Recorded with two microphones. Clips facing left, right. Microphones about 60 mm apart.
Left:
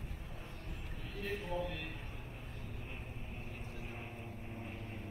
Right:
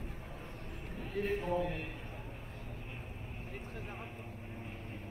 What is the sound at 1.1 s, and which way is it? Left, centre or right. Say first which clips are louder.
Speech: right 6 dB; right.